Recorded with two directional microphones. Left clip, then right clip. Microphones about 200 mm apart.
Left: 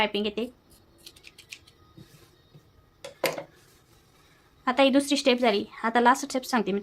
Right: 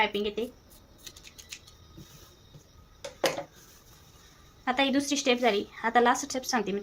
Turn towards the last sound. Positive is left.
turn(degrees=35)  # may be behind; listen again after turning